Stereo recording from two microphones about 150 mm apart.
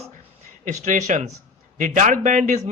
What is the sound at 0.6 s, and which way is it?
A man's voice, 55° right (ahead or behind).